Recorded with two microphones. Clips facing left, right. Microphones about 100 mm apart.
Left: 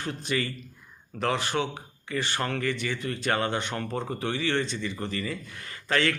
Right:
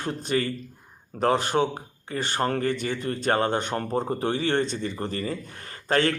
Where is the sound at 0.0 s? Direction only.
45° right (ahead or behind).